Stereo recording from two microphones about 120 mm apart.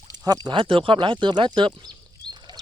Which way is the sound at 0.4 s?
45° right (ahead or behind).